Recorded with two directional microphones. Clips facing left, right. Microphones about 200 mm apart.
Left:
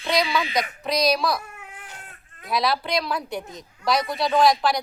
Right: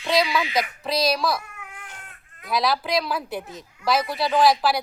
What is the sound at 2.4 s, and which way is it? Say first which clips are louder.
Speech: even; centre (ahead or behind).